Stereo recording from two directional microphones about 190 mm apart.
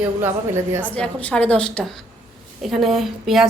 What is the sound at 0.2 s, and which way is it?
Speech, 15° right (ahead or behind).